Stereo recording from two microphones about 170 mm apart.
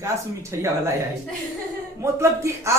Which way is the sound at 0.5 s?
15° right (ahead or behind).